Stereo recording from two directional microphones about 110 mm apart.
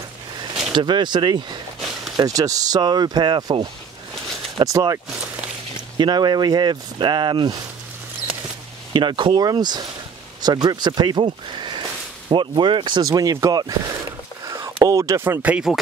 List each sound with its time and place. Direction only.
0.7 s speech: 45° right (ahead or behind)
4.6 s speech: 30° right (ahead or behind)
5.9 s speech: 40° right (ahead or behind)
8.9 s speech: 45° right (ahead or behind)
13.0 s speech: 35° right (ahead or behind); by 15.8 s 10° right (ahead or behind)